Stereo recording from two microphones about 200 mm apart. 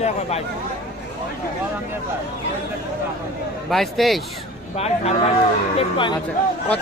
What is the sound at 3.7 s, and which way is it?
Speech, centre (ahead or behind).